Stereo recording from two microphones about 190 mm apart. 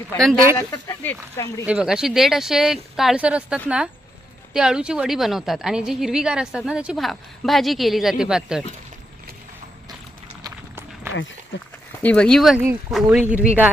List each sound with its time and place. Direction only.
0.5 s speech: 15° left (ahead or behind)
1.6 s a woman's voice: 5° right (ahead or behind)
10.4 s run: 15° right (ahead or behind)
11.1 s speech: 80° left
12.0 s a woman's voice: 5° left (ahead or behind)